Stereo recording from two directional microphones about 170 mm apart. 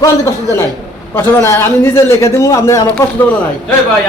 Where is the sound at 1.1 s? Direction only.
15° left (ahead or behind).